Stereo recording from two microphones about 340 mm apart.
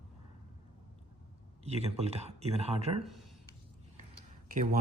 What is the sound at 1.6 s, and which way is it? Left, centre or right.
Speech, centre.